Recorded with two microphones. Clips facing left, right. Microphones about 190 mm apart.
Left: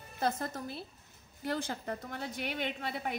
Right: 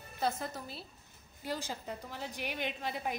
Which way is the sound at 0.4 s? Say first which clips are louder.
Left 3 dB; 55° left (ahead or behind).